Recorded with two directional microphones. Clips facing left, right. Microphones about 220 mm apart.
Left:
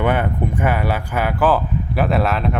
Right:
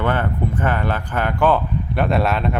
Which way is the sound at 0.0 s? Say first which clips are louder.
Left 2 dB; 15° left (ahead or behind).